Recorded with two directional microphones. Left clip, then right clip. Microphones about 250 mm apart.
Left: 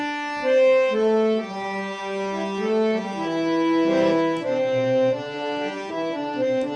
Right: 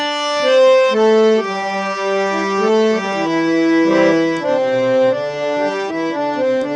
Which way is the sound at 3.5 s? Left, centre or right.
Right.